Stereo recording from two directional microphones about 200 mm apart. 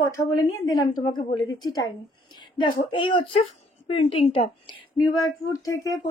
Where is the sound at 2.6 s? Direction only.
25° left (ahead or behind).